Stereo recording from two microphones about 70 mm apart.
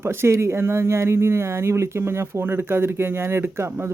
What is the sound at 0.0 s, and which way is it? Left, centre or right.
Speech, right.